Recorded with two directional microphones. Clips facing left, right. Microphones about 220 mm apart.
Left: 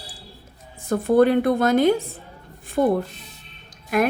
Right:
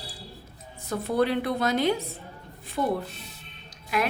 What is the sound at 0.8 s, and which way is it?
Speech, 50° left (ahead or behind).